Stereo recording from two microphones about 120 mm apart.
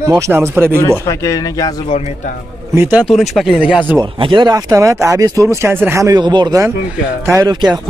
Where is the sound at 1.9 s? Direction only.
60° left (ahead or behind).